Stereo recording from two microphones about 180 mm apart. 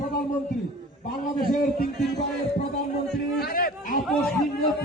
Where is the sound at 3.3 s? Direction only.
55° left (ahead or behind).